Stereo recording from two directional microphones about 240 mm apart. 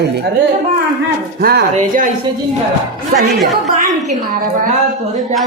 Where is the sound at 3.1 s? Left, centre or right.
Right.